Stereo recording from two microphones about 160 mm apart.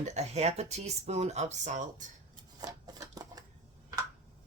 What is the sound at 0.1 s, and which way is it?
Speech, 45° right (ahead or behind).